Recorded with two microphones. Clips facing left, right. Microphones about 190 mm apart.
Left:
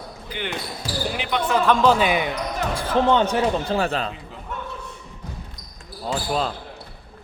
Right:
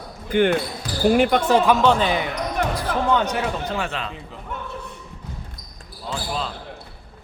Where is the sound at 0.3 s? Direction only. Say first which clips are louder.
Right 12 dB; 50° right (ahead or behind).